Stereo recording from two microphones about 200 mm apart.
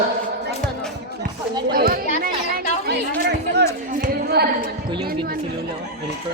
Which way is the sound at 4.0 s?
50° right (ahead or behind).